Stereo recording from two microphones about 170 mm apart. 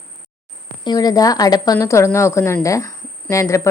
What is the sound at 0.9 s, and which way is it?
A woman's voice, 25° left (ahead or behind).